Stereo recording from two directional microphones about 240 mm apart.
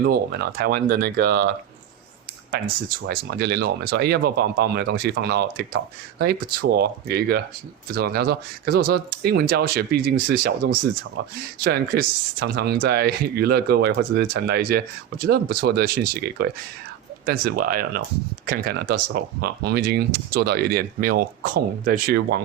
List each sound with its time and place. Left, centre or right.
0.0 s speech: right
2.6 s speech: right
11.6 s speech: right